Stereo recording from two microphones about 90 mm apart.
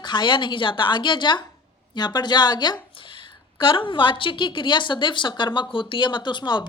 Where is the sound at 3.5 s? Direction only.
65° left (ahead or behind).